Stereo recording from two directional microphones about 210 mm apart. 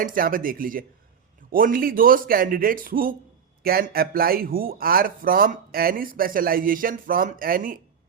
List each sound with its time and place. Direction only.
0.0 s speech: 40° right (ahead or behind)